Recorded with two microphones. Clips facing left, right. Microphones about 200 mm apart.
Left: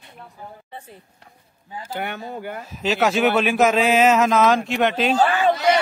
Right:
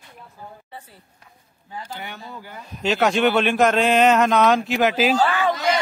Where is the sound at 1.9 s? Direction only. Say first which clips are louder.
Left 7 dB; 60° left (ahead or behind).